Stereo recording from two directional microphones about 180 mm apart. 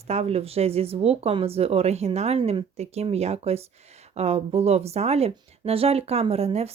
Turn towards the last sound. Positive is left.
turn(degrees=-35)  # may be behind; listen again after turning